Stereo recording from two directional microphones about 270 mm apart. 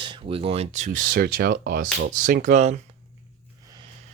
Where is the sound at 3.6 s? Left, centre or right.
Centre.